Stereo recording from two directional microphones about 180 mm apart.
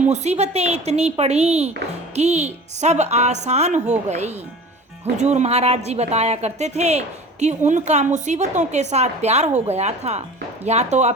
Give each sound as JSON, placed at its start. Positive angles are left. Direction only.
{"t": 0.0, "sound": "a woman's voice", "side_deg": -40}